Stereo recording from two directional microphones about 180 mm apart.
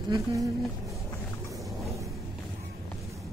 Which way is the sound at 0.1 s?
20° right (ahead or behind).